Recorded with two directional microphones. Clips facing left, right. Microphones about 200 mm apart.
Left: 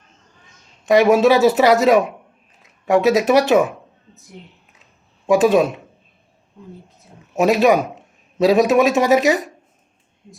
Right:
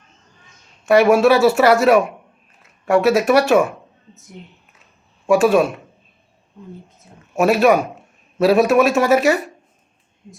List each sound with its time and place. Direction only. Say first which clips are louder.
0.9 s speech: even; 20° left (ahead or behind)
4.1 s a woman's voice: right 2 dB; centre (ahead or behind)
5.2 s speech: even; 20° left (ahead or behind)
7.3 s a man's voice: even; 20° left (ahead or behind)